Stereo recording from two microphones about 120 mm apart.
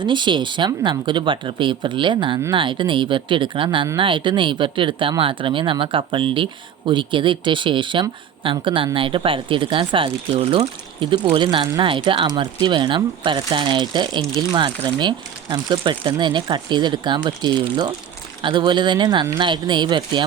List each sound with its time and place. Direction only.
0.0 s speech: 40° right (ahead or behind)
11.3 s speech: 45° right (ahead or behind)